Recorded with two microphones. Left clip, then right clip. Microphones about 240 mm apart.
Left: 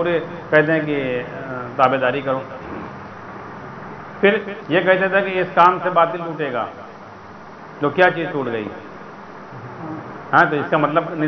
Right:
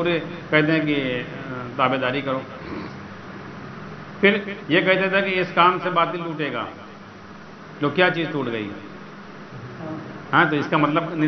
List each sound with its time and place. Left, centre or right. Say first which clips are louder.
0.0 s a man's voice: left 3 dB; right
4.2 s a man's voice: left 2 dB; right
7.8 s a man's voice: left 4 dB; right
10.3 s a man's voice: left 3 dB; right